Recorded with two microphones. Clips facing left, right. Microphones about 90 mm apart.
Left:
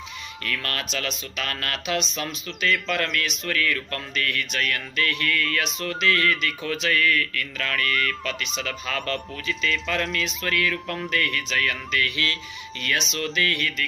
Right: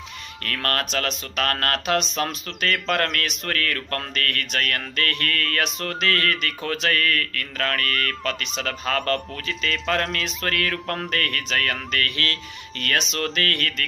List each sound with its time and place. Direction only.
0.4 s speech: 50° right (ahead or behind)